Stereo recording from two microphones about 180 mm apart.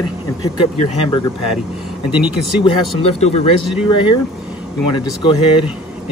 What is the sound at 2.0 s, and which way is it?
Speech, 5° right (ahead or behind).